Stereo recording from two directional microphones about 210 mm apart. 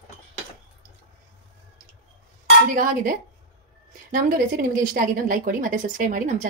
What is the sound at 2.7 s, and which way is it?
A woman's voice, 40° right (ahead or behind).